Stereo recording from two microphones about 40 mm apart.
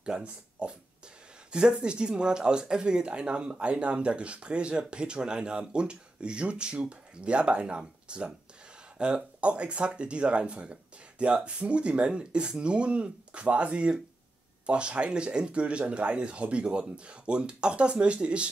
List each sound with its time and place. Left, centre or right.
0.0 s speech: right